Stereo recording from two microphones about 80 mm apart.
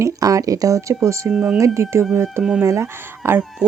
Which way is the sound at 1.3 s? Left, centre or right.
Centre.